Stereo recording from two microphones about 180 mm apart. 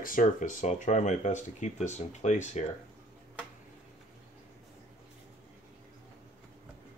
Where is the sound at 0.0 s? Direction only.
50° left (ahead or behind).